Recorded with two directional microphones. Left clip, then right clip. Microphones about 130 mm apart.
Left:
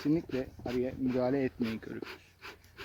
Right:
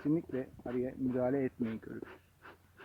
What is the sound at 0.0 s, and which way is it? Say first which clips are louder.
Speech: left 3 dB; centre (ahead or behind).